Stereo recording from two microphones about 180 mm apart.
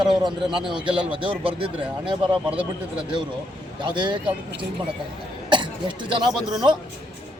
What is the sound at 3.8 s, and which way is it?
Speech, 25° right (ahead or behind).